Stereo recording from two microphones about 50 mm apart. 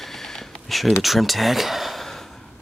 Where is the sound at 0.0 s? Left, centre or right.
Centre.